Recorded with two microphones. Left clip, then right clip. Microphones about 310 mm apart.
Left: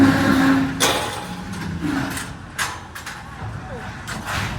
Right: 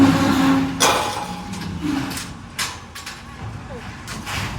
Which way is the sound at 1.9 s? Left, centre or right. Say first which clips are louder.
Even; centre.